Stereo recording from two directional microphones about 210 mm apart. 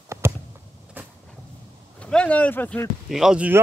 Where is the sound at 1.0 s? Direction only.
10° right (ahead or behind).